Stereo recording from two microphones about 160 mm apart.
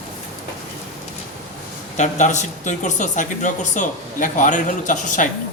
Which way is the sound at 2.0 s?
50° left (ahead or behind).